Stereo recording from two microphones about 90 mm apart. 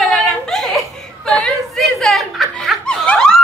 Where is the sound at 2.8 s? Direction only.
10° left (ahead or behind).